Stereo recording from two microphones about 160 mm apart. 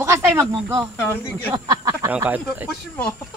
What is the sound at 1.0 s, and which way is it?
Speech, 10° left (ahead or behind).